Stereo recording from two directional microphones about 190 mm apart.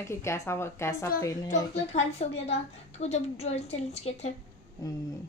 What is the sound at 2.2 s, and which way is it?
A woman's voice, 35° left (ahead or behind).